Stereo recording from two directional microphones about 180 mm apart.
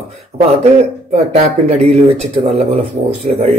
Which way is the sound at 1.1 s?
35° right (ahead or behind).